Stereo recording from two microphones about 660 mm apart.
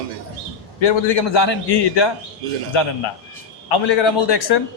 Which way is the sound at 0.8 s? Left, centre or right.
Left.